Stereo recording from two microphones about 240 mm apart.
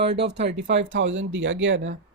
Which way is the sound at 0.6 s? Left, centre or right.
Right.